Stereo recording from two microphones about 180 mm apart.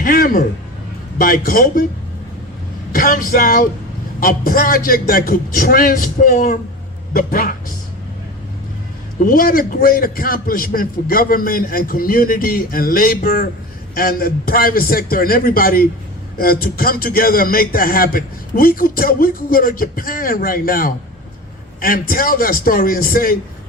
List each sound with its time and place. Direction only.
0.0 s a man's voice: 50° left (ahead or behind)
2.9 s a man's voice: 50° left (ahead or behind)
9.1 s a man's voice: 50° left (ahead or behind)